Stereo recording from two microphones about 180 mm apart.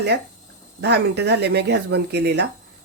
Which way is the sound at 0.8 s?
70° right (ahead or behind).